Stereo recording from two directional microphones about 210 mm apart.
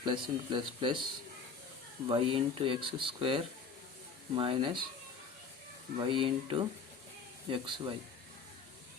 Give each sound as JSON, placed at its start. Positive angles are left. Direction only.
{"t": 0.0, "sound": "speech", "side_deg": -25}
{"t": 2.0, "sound": "speech", "side_deg": -25}
{"t": 6.0, "sound": "speech", "side_deg": -25}